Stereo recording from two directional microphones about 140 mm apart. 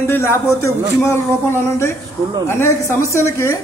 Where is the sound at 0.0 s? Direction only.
15° left (ahead or behind).